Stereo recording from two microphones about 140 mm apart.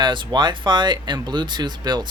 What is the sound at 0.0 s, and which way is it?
Speech, 35° right (ahead or behind).